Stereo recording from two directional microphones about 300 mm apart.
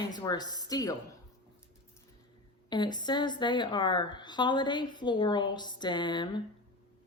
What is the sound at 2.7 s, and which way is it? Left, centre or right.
Speech, centre.